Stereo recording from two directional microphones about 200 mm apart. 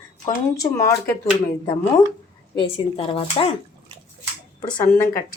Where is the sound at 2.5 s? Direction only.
25° left (ahead or behind).